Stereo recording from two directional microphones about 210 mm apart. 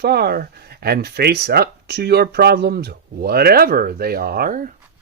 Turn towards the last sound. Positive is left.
turn(degrees=-40)  # may be behind; listen again after turning